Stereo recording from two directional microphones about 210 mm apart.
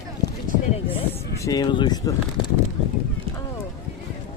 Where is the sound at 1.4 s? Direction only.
20° left (ahead or behind).